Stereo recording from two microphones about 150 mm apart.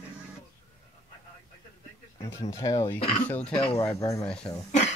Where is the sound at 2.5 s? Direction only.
20° left (ahead or behind).